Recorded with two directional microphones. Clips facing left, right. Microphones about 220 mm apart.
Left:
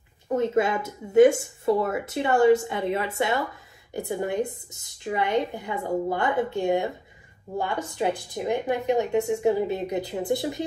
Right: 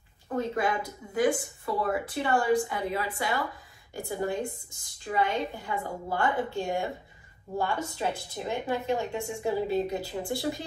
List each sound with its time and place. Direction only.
0.4 s speech: 25° left (ahead or behind)